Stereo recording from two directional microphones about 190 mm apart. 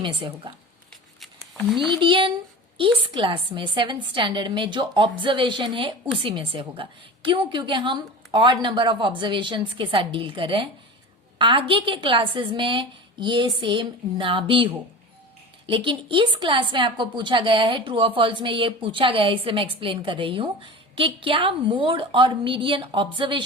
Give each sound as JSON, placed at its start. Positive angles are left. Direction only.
{"t": 0.0, "sound": "speech", "side_deg": -25}
{"t": 1.2, "sound": "a sound", "side_deg": 0}
{"t": 1.9, "sound": "speech", "side_deg": -25}